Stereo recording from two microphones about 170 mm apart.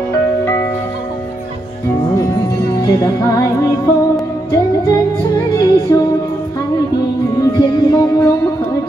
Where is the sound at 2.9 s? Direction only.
20° left (ahead or behind).